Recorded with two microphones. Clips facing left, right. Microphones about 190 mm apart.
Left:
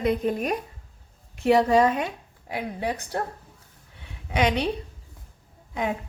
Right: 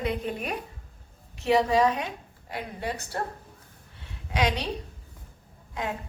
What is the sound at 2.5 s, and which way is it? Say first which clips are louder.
Speech: left 4 dB; 15° left (ahead or behind).